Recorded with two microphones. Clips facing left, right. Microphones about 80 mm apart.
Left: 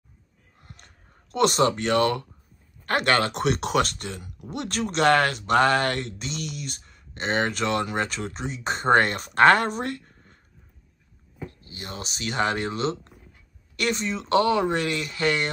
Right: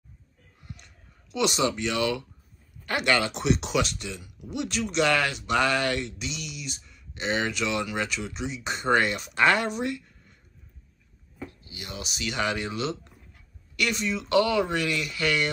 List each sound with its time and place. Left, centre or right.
0.6 s a sound: left
2.8 s speech: left
11.7 s speech: left